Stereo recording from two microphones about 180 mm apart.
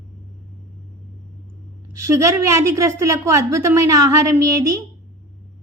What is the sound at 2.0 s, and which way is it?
A woman's voice, 15° right (ahead or behind).